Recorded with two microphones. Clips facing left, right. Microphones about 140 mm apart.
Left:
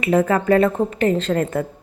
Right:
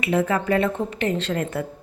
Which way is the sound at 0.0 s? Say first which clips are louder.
Left 4 dB; 45° left (ahead or behind).